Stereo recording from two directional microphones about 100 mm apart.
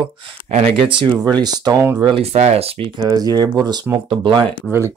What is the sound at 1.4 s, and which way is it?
Speech, 40° right (ahead or behind).